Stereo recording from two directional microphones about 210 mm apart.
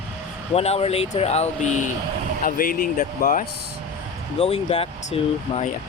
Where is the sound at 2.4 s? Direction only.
45° left (ahead or behind).